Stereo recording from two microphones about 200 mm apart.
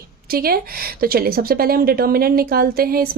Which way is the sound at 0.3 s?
50° right (ahead or behind).